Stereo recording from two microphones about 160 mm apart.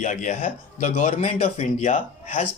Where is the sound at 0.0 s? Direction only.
50° left (ahead or behind).